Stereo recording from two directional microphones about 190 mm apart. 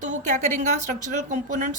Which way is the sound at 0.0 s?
40° right (ahead or behind).